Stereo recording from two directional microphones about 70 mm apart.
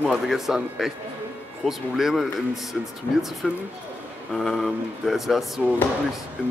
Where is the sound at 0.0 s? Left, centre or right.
Centre.